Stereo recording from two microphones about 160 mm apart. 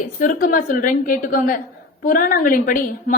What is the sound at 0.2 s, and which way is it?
A woman's voice, 60° left (ahead or behind).